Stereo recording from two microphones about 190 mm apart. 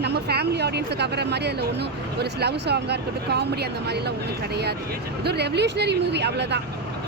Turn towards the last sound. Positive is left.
turn(degrees=-65)  # may be behind; listen again after turning